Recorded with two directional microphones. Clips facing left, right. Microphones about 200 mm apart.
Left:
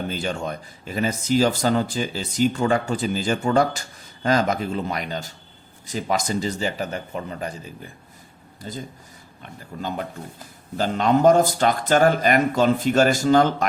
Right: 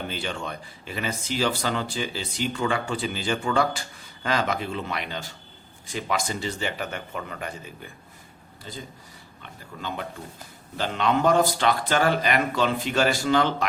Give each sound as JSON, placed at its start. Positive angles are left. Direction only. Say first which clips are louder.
{"t": 0.1, "sound": "speech", "louder": "left 5 dB", "side_deg": 45}